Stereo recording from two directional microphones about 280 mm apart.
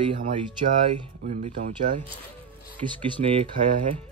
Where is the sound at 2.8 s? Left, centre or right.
Centre.